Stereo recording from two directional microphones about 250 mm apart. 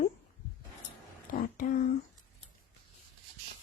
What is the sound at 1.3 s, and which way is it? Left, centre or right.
Speech, left.